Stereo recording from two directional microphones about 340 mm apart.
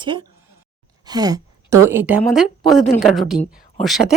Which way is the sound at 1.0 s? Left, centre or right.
Centre.